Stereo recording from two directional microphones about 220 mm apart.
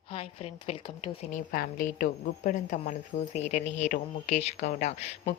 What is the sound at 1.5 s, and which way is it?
Speech, 40° left (ahead or behind).